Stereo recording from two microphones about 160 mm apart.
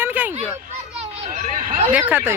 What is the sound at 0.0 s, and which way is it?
Children playing, 10° right (ahead or behind).